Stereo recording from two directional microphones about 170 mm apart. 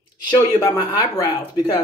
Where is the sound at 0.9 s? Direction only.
25° left (ahead or behind).